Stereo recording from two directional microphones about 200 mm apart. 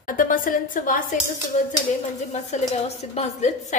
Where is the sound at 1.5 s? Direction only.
35° left (ahead or behind).